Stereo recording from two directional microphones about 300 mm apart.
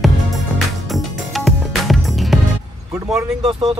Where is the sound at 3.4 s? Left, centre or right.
Right.